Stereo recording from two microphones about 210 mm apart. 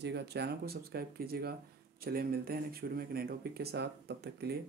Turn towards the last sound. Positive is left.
turn(degrees=-50)  # may be behind; listen again after turning